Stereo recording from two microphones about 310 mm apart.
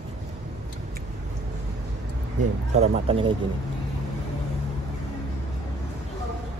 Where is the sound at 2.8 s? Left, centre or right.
Centre.